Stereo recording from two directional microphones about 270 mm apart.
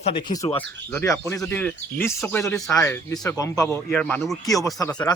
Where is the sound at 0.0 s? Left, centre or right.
Centre.